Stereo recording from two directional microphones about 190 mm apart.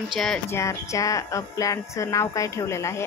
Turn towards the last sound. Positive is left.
turn(degrees=15)  # may be behind; listen again after turning